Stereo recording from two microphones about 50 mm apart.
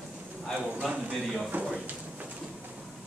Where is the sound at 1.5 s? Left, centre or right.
Right.